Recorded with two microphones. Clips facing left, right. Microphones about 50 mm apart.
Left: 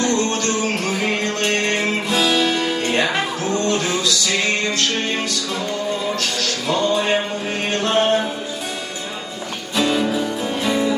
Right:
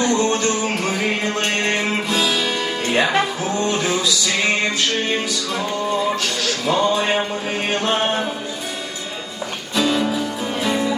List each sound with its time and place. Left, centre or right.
0.0 s music: centre
2.8 s music: centre
6.7 s music: centre
6.9 s music: centre
9.7 s music: centre